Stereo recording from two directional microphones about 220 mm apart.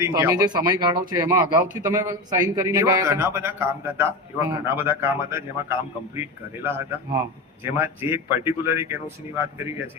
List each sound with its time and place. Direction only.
0.0 s speech: 10° right (ahead or behind)